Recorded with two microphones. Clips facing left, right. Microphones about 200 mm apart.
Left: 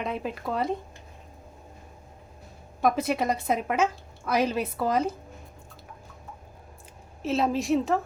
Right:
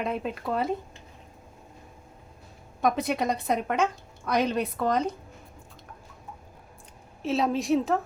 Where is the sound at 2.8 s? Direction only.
Centre (ahead or behind).